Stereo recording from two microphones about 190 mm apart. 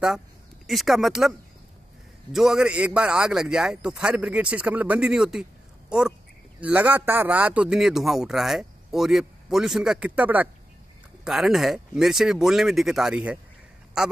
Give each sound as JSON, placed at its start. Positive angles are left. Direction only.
{"t": 0.7, "sound": "a man's voice", "side_deg": 0}
{"t": 2.3, "sound": "a man's voice", "side_deg": -5}